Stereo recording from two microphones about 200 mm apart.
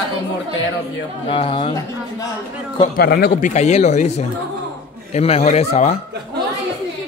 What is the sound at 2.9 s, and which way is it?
Speech, 50° left (ahead or behind).